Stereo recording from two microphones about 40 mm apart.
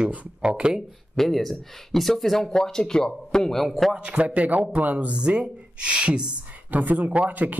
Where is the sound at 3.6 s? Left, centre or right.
Centre.